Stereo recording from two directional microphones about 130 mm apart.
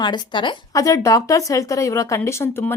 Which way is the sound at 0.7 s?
25° left (ahead or behind).